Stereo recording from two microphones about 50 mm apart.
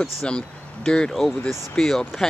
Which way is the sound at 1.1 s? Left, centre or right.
Centre.